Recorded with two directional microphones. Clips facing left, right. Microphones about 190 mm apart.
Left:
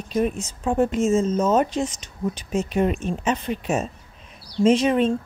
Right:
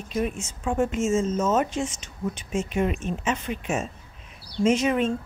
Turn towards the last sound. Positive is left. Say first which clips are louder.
# left 4 dB
turn(degrees=30)  # may be behind; listen again after turning